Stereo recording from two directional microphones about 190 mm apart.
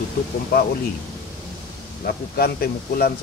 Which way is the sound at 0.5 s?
55° left (ahead or behind).